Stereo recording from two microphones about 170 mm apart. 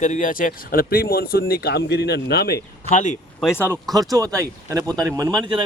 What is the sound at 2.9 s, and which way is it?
Speech, 45° left (ahead or behind).